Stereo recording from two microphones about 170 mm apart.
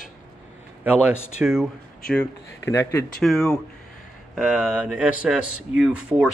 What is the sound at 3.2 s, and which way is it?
Speech, centre (ahead or behind).